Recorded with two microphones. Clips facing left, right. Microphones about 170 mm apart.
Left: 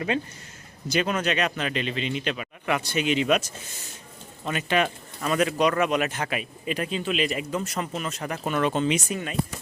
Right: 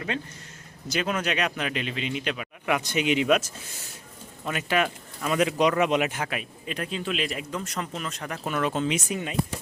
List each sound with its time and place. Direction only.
0.9 s speech: centre (ahead or behind)
4.4 s speech: 5° right (ahead or behind)
6.2 s speech: 5° left (ahead or behind)
9.0 s speech: 15° right (ahead or behind)